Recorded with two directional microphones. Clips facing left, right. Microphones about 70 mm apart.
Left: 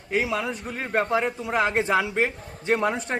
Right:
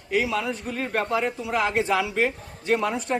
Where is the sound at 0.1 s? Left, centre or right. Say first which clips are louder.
Right 1 dB; left.